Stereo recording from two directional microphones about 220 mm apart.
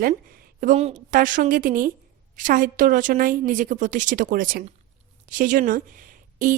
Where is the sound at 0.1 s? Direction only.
40° right (ahead or behind).